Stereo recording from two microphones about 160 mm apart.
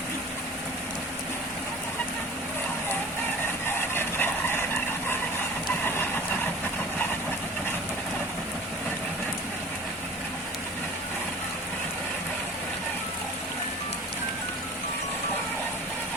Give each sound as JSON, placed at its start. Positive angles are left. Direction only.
{"t": 3.8, "sound": "vehicle", "side_deg": 15}